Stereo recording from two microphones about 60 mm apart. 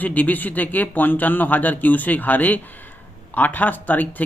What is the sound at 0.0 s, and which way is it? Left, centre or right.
Speech, left.